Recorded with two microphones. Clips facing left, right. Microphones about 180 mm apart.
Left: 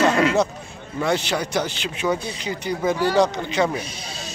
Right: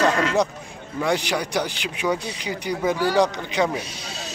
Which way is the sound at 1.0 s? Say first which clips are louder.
Left 1 dB; 15° right (ahead or behind).